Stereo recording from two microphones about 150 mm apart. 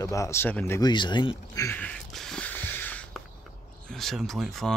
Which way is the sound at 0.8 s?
30° left (ahead or behind).